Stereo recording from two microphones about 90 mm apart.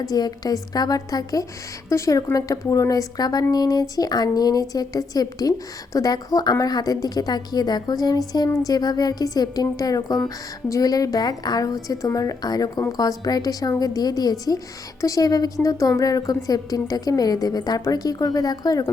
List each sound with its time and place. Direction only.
0.0 s a woman's voice: 45° left (ahead or behind)